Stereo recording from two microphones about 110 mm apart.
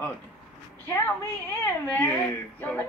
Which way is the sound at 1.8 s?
15° left (ahead or behind).